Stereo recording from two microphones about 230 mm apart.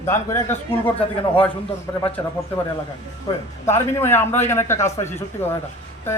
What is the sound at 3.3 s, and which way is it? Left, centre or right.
A man's voice, centre.